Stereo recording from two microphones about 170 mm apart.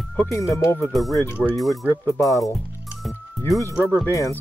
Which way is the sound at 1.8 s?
10° left (ahead or behind).